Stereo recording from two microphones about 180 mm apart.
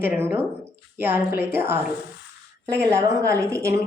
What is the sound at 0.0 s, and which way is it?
A woman's voice, 10° right (ahead or behind).